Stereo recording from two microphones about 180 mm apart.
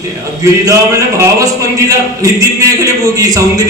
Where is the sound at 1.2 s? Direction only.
20° right (ahead or behind).